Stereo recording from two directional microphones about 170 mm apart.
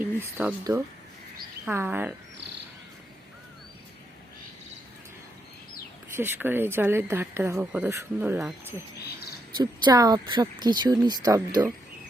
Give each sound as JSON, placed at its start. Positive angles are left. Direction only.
{"t": 0.0, "sound": "speech", "side_deg": -10}
{"t": 1.6, "sound": "speech", "side_deg": -10}
{"t": 6.1, "sound": "speech", "side_deg": -10}
{"t": 9.6, "sound": "speech", "side_deg": -20}